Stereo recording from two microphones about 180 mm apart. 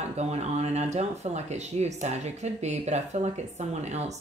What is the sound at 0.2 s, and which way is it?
Speech, 35° right (ahead or behind).